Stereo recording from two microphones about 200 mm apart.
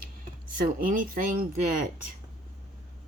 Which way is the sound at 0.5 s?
45° right (ahead or behind).